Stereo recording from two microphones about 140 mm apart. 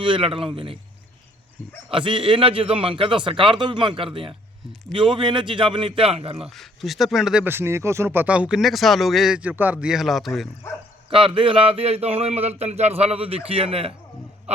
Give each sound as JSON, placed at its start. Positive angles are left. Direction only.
{"t": 0.0, "sound": "a man's voice", "side_deg": -35}
{"t": 1.9, "sound": "a man's voice", "side_deg": -35}
{"t": 6.6, "sound": "speech", "side_deg": 0}
{"t": 7.4, "sound": "speech", "side_deg": -15}
{"t": 11.1, "sound": "speech", "side_deg": -40}